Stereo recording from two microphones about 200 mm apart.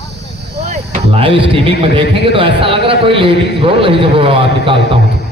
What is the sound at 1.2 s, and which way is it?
A man's voice, 25° right (ahead or behind).